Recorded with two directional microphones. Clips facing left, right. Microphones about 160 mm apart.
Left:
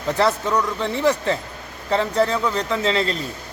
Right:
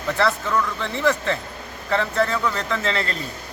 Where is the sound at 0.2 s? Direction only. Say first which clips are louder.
Left 2 dB; 20° left (ahead or behind).